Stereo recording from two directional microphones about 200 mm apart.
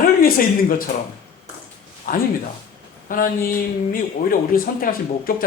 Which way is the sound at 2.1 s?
45° left (ahead or behind).